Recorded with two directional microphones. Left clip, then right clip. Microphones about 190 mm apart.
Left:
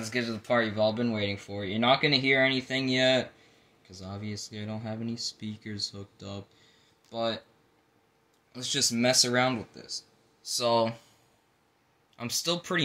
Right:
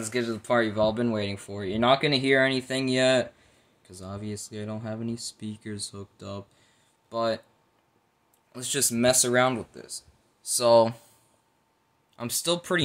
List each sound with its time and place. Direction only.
0.0 s speech: 25° right (ahead or behind)
8.5 s speech: 35° right (ahead or behind)
12.2 s speech: 25° right (ahead or behind)